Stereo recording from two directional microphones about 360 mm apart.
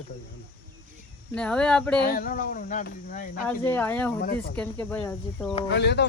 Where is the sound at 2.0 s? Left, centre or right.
Left.